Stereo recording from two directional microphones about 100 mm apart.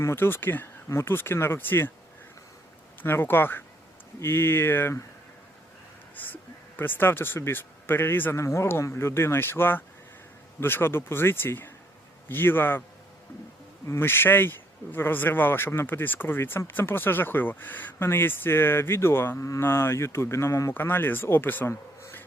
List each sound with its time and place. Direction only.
0.0 s speech: 25° left (ahead or behind)
3.0 s speech: 20° left (ahead or behind)
6.1 s speech: 20° left (ahead or behind)
13.8 s speech: 25° left (ahead or behind)